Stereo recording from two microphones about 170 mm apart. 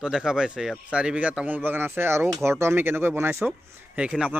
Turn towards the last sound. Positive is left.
turn(degrees=-5)  # may be behind; listen again after turning